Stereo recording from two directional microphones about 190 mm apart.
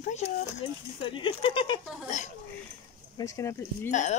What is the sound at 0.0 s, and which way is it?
Speech, 35° left (ahead or behind).